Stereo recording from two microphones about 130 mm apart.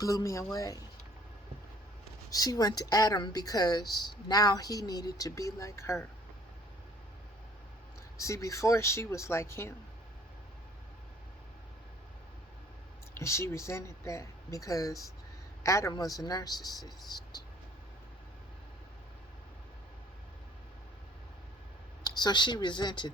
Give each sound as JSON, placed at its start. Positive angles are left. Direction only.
{"t": 0.0, "sound": "speech", "side_deg": 25}
{"t": 2.3, "sound": "speech", "side_deg": 30}
{"t": 8.2, "sound": "speech", "side_deg": 25}
{"t": 13.1, "sound": "speech", "side_deg": 20}
{"t": 22.0, "sound": "speech", "side_deg": 30}